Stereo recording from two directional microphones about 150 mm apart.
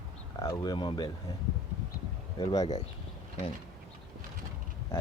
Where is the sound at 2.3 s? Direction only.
25° left (ahead or behind).